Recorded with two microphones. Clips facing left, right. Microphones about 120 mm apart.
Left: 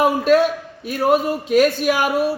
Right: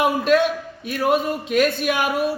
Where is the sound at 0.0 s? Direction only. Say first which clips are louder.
Left 3 dB; 40° left (ahead or behind).